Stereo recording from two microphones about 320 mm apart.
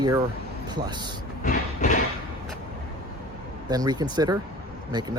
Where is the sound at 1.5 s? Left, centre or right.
Left.